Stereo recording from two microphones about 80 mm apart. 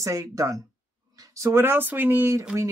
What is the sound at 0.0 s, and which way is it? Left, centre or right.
Speech, right.